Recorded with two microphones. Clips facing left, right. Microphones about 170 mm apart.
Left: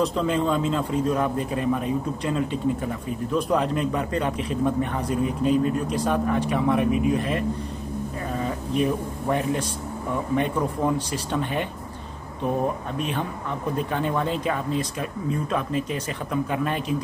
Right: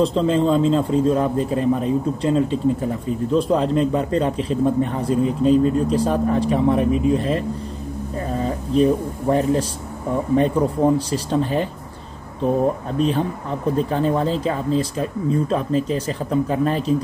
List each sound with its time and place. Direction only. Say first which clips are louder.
0.0 s a man's voice: right 5 dB; 25° right (ahead or behind)
12.9 s speech: right 8 dB; 35° right (ahead or behind)